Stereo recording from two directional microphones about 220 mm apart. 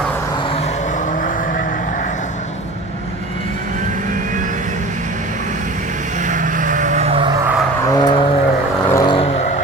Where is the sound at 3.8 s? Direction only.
35° right (ahead or behind).